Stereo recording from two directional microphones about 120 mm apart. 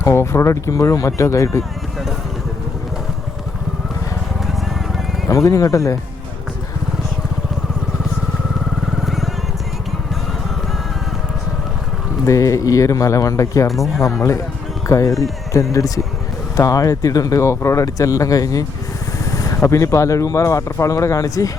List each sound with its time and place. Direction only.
0.0 s speech: 25° left (ahead or behind)
5.3 s speech: 25° left (ahead or behind)
9.0 s vehicle: centre (ahead or behind)
12.2 s speech: 25° left (ahead or behind)
13.7 s speech: centre (ahead or behind)
14.0 s speech: 25° left (ahead or behind)